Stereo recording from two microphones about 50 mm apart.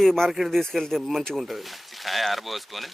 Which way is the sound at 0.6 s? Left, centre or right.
Centre.